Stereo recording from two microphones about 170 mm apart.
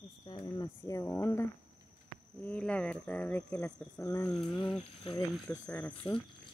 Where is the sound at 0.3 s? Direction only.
25° left (ahead or behind).